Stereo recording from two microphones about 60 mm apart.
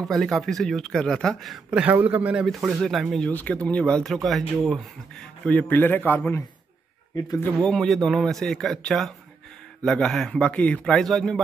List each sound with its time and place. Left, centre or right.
0.1 s speech: centre
1.7 s a man's voice: right
2.4 s speech: centre
3.3 s speech: left
4.0 s speech: centre
5.4 s a man's voice: left
7.6 s speech: centre
10.4 s speech: left; by 11.4 s centre